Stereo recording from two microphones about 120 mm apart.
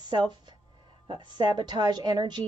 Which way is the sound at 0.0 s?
40° right (ahead or behind).